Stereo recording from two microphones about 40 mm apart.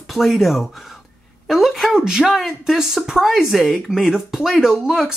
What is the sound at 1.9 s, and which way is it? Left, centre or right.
Speech, centre.